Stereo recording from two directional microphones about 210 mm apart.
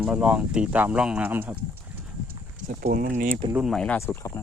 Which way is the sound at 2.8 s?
45° right (ahead or behind).